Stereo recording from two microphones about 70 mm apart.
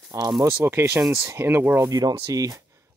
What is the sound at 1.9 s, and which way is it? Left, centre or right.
Speech, right.